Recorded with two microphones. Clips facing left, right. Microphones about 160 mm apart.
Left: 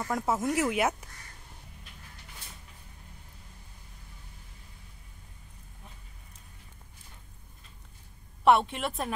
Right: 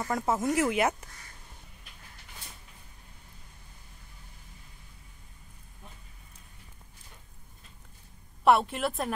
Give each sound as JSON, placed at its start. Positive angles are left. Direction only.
{"t": 0.0, "sound": "speech", "side_deg": 0}
{"t": 8.5, "sound": "speech", "side_deg": 0}